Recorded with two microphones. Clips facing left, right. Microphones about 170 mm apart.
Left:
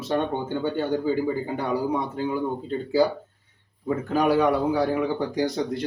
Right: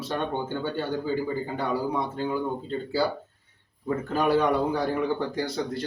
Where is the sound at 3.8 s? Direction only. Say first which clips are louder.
Left 3 dB; 10° left (ahead or behind).